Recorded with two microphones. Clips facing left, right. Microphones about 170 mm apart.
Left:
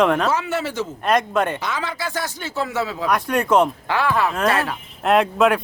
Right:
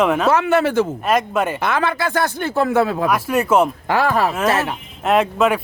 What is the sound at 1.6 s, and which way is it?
Speech, 60° right (ahead or behind).